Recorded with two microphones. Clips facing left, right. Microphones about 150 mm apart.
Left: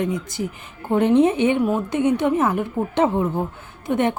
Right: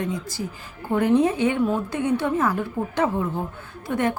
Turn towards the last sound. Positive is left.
turn(degrees=20)  # may be behind; listen again after turning